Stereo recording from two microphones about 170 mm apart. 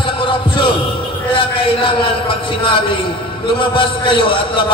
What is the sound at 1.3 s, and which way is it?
A man's voice, 30° left (ahead or behind).